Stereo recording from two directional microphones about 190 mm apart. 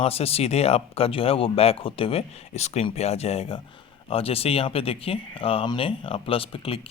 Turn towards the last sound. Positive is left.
turn(degrees=30)  # may be behind; listen again after turning